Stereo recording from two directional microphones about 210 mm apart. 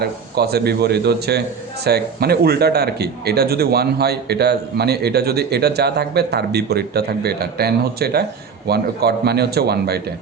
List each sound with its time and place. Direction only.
0.0 s a man's voice: 50° right (ahead or behind)